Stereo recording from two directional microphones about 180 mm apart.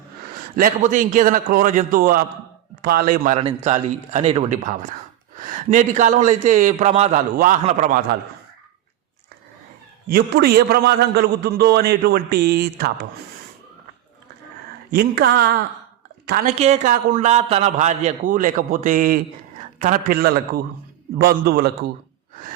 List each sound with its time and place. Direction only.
0.5 s a man's voice: 50° right (ahead or behind)
3.3 s a man's voice: 35° right (ahead or behind)
7.3 s a man's voice: 45° right (ahead or behind)
10.1 s a man's voice: 60° right (ahead or behind)
14.8 s a man's voice: 65° right (ahead or behind)
16.5 s a man's voice: 40° right (ahead or behind); by 21.7 s 60° right (ahead or behind)